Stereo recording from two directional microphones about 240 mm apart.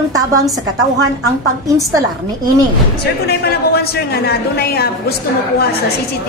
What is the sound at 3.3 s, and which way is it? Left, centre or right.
A man's voice, left.